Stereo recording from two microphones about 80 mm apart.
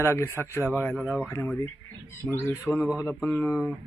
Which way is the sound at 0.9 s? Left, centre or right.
Centre.